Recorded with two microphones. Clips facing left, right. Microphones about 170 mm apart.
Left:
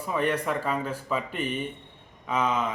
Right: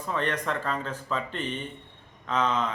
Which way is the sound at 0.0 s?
10° left (ahead or behind).